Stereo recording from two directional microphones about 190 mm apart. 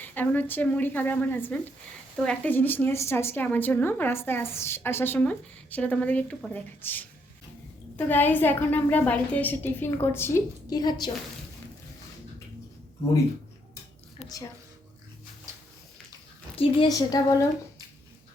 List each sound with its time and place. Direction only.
0.0 s a woman's voice: 10° left (ahead or behind)
16.6 s a woman's voice: 25° left (ahead or behind)